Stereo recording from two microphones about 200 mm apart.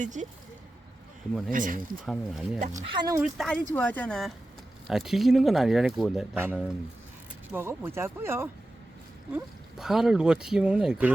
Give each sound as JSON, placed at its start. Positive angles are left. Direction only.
{"t": 0.0, "sound": "speech", "side_deg": -40}
{"t": 1.5, "sound": "speech", "side_deg": -40}
{"t": 2.0, "sound": "speech", "side_deg": 0}
{"t": 2.6, "sound": "speech", "side_deg": -35}
{"t": 2.9, "sound": "speech", "side_deg": -20}
{"t": 3.2, "sound": "speech", "side_deg": 0}